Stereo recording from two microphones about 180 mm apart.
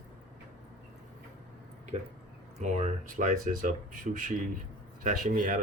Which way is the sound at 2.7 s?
40° right (ahead or behind).